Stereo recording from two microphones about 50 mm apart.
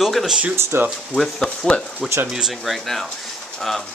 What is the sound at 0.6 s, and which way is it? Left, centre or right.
Speech, right.